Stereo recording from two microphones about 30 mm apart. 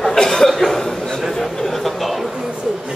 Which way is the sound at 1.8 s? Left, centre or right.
Centre.